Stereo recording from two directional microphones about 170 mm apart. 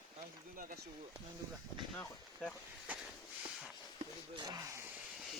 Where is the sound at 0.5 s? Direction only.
55° right (ahead or behind).